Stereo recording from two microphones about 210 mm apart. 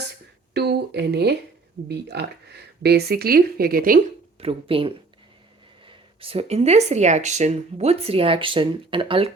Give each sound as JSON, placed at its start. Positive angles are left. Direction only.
{"t": 0.5, "sound": "a sound", "side_deg": -50}
{"t": 1.9, "sound": "speech", "side_deg": -50}
{"t": 4.4, "sound": "speech", "side_deg": -25}